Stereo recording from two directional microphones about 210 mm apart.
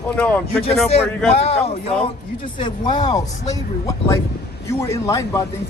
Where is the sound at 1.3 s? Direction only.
30° left (ahead or behind).